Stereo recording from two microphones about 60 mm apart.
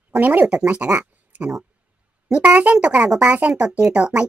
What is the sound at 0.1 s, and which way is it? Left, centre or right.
Speech, right.